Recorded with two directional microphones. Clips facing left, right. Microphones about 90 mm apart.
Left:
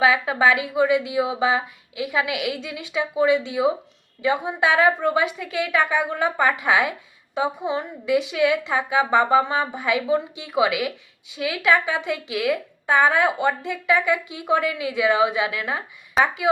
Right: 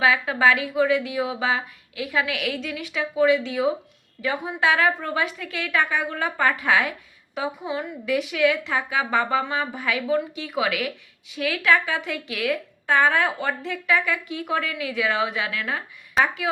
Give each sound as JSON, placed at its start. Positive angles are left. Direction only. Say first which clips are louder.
{"t": 0.0, "sound": "a woman's voice", "louder": "left 1 dB", "side_deg": 20}